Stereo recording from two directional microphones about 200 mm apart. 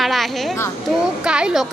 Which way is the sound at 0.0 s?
Centre (ahead or behind).